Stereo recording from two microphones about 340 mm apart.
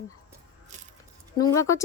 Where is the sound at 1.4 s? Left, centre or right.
Centre.